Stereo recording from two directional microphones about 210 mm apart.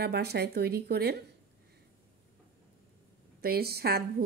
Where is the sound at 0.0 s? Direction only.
50° right (ahead or behind).